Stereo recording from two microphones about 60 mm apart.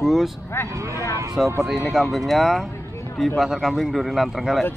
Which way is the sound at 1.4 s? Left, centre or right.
Centre.